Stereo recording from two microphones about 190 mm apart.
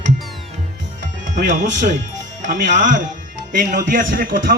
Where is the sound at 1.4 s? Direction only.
40° right (ahead or behind).